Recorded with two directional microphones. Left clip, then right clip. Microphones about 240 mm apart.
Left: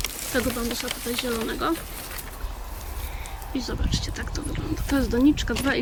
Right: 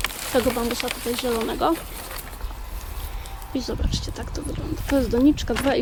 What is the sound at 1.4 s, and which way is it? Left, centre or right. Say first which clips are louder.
Speech: right 6 dB; centre.